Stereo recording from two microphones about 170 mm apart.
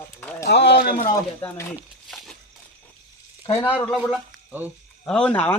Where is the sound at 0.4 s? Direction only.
75° left (ahead or behind).